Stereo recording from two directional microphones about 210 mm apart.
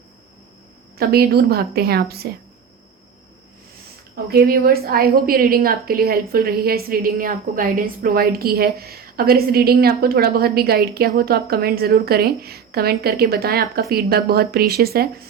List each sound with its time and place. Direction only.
0.9 s a woman's voice: 50° right (ahead or behind)
4.1 s a woman's voice: 45° right (ahead or behind)